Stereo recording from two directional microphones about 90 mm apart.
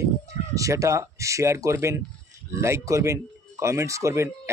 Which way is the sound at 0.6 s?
35° right (ahead or behind).